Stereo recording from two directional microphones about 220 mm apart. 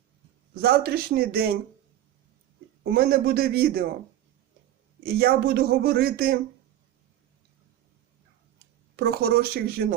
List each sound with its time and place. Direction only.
0.6 s speech: 45° right (ahead or behind)
2.9 s speech: 45° right (ahead or behind)
5.0 s speech: 45° right (ahead or behind)
9.0 s speech: 45° right (ahead or behind)